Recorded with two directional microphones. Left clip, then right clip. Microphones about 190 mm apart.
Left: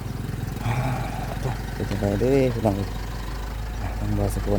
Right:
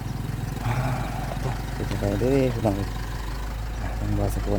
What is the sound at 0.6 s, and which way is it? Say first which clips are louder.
Vehicle: left 1 dB; 15° left (ahead or behind).